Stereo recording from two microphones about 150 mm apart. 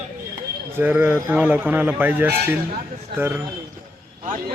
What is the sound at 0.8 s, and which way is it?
A man's voice, 15° right (ahead or behind).